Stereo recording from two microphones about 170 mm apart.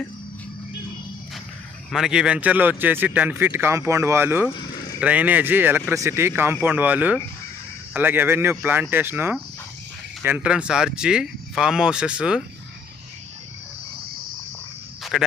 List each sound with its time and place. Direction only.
1.9 s speech: 5° right (ahead or behind)
15.1 s speech: centre (ahead or behind)